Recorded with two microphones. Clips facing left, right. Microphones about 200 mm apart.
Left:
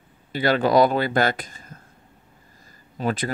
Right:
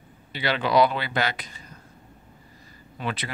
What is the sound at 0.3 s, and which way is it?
Speech, 45° left (ahead or behind).